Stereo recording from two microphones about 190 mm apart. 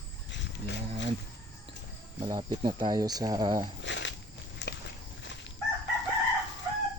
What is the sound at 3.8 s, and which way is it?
Snake, 70° left (ahead or behind).